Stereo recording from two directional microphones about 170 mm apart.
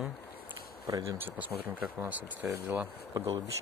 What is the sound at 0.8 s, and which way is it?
Speech, 20° right (ahead or behind).